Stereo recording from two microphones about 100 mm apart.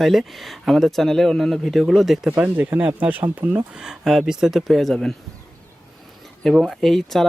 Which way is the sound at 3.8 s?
5° right (ahead or behind).